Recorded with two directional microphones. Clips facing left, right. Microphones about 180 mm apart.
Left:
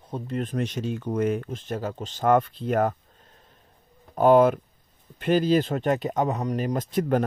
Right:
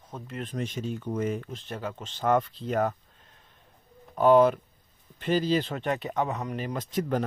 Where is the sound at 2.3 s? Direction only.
55° left (ahead or behind).